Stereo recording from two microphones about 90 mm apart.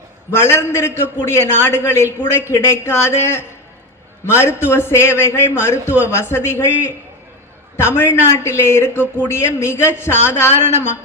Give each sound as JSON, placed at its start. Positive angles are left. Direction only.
{"t": 0.3, "sound": "a man's voice", "side_deg": 30}
{"t": 7.8, "sound": "a man's voice", "side_deg": 25}